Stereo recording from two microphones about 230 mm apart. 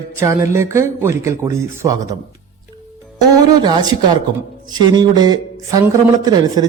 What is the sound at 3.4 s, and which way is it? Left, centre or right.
Speech, centre.